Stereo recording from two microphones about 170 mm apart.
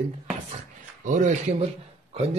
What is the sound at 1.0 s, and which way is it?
Speech, 45° right (ahead or behind).